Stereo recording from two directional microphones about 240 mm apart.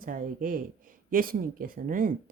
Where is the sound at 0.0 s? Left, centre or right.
Right.